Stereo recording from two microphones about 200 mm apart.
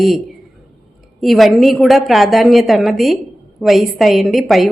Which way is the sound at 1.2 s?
Centre (ahead or behind).